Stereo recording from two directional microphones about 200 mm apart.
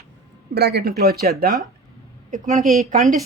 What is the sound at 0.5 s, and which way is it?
Speech, 55° right (ahead or behind).